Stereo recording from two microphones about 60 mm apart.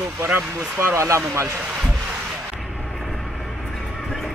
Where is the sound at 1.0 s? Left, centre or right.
Right.